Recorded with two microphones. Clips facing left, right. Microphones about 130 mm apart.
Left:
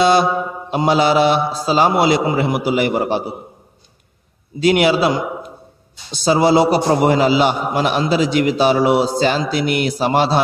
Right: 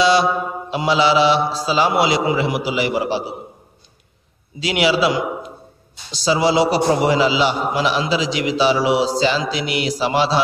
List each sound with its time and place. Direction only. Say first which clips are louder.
0.0 s a man's voice: left 2 dB; 50° left (ahead or behind)
4.6 s a man's voice: left 4 dB; 50° left (ahead or behind)